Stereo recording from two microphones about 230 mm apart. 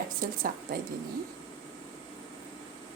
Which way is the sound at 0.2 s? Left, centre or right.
Right.